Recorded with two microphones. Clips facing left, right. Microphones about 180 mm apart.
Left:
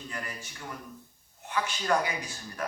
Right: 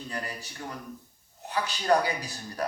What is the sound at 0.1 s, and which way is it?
Speech, 35° right (ahead or behind).